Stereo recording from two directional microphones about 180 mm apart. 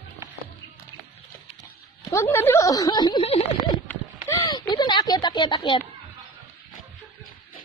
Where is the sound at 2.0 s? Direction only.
15° left (ahead or behind); by 3.7 s 30° left (ahead or behind).